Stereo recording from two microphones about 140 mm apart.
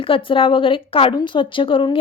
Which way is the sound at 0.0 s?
40° left (ahead or behind).